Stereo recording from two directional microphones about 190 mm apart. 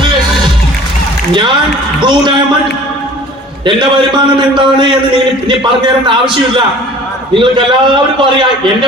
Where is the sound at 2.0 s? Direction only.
25° right (ahead or behind).